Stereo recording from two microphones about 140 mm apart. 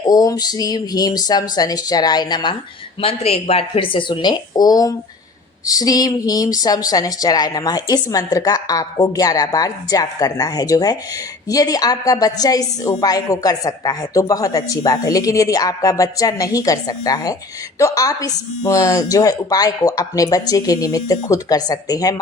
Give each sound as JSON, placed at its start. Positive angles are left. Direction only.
{"t": 0.1, "sound": "speech", "side_deg": 25}
{"t": 3.0, "sound": "speech", "side_deg": 45}